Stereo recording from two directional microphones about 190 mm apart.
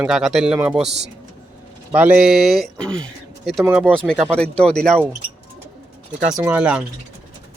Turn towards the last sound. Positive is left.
turn(degrees=-5)  # may be behind; listen again after turning